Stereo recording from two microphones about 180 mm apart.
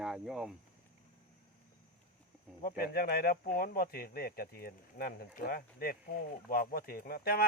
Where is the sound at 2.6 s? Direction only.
55° left (ahead or behind).